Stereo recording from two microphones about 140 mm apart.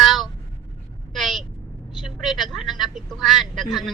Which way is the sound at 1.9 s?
Centre (ahead or behind).